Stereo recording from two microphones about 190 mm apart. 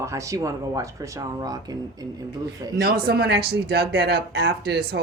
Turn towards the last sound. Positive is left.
turn(degrees=-60)  # may be behind; listen again after turning